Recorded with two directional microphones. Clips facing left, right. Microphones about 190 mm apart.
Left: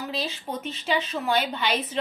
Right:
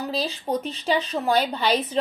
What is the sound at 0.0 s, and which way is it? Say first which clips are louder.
Speech: right 4 dB; 35° right (ahead or behind).